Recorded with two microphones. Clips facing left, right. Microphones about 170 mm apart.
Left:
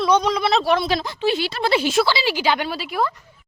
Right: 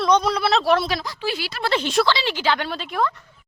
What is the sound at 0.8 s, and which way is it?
Speech, 25° left (ahead or behind).